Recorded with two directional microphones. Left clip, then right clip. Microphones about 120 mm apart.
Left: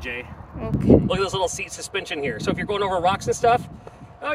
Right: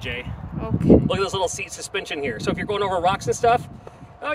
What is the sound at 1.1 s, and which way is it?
Speech, 65° right (ahead or behind).